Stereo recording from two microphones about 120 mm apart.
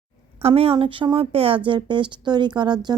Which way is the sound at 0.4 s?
50° right (ahead or behind).